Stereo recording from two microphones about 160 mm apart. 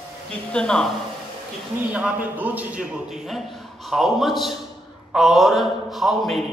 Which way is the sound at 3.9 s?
Centre (ahead or behind).